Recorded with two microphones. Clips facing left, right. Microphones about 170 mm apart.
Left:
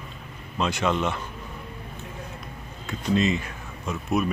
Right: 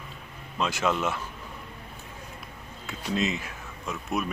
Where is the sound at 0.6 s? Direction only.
Centre (ahead or behind).